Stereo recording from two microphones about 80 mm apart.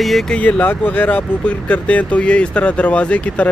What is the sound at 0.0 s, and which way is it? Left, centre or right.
Speech, centre.